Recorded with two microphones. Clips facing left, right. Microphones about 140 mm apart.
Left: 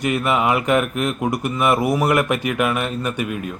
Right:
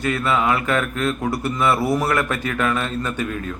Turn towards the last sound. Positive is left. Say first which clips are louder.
# left 1 dB
turn(degrees=10)  # may be behind; listen again after turning